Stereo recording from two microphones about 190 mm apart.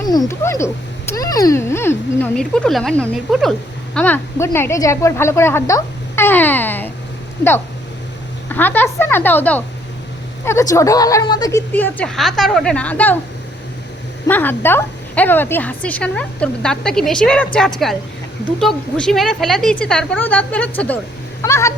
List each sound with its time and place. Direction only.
0.1 s a woman's voice: 15° left (ahead or behind)
8.4 s a woman's voice: 10° left (ahead or behind)
14.3 s a woman's voice: 10° left (ahead or behind)